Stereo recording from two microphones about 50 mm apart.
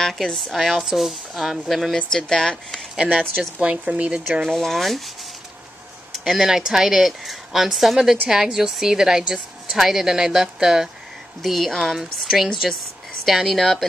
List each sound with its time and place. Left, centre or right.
0.0 s speech: centre
2.1 s speech: centre
3.5 s speech: right
4.5 s speech: centre
6.2 s speech: centre
11.4 s speech: centre